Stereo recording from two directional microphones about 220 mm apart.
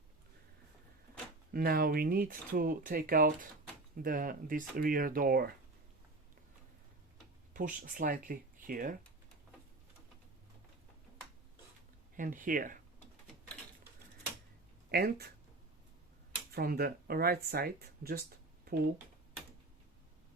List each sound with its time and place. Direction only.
1.5 s speech: 40° right (ahead or behind)
7.5 s speech: 35° right (ahead or behind)
12.1 s speech: 35° right (ahead or behind)
14.8 s speech: 45° right (ahead or behind)
16.5 s speech: 45° right (ahead or behind)